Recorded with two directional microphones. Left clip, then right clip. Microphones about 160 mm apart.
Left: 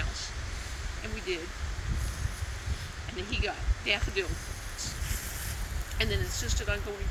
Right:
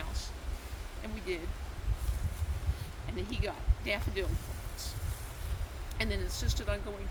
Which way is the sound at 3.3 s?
30° right (ahead or behind).